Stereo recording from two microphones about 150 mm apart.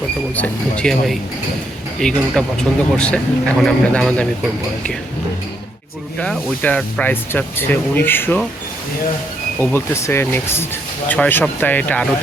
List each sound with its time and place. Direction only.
0.3 s speech: 10° left (ahead or behind)
6.1 s speech: 10° left (ahead or behind)
9.6 s speech: 15° left (ahead or behind)